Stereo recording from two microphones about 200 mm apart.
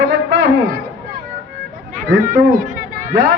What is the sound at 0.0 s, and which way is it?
Music, 65° right (ahead or behind).